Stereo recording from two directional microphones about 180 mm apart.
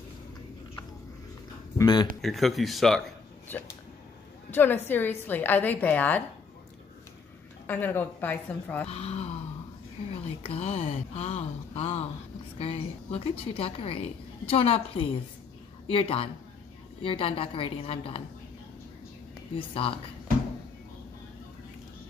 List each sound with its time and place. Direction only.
1.8 s speech: 25° left (ahead or behind)
2.2 s speech: centre (ahead or behind)
3.4 s a woman's voice: 10° left (ahead or behind)
7.6 s a woman's voice: 10° left (ahead or behind)
8.8 s a woman's voice: 35° left (ahead or behind)
10.4 s a woman's voice: 35° left (ahead or behind)
19.5 s a woman's voice: 30° left (ahead or behind)